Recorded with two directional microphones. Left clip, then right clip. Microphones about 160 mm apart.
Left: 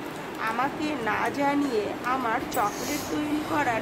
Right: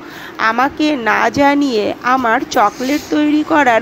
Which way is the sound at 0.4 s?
50° right (ahead or behind).